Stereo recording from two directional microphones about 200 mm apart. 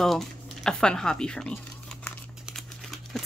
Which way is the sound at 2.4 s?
Centre (ahead or behind).